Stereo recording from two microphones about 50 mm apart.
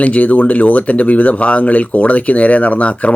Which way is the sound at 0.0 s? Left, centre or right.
Left.